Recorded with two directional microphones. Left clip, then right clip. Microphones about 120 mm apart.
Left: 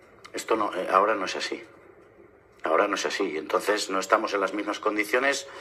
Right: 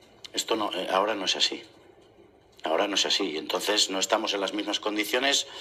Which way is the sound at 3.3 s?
35° left (ahead or behind).